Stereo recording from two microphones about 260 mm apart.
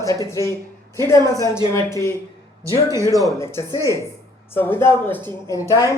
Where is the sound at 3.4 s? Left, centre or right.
Centre.